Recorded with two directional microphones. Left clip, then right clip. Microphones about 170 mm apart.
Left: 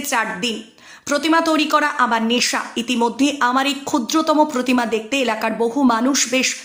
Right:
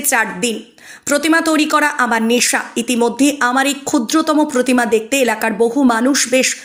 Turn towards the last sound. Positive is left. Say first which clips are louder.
# right 4 dB
turn(degrees=-20)  # may be behind; listen again after turning